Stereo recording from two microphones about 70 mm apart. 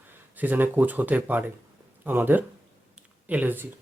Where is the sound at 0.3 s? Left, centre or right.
Right.